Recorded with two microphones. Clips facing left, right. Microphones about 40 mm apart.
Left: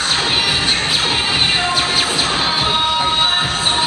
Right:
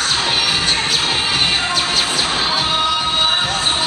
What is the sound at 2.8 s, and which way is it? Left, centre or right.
Train, centre.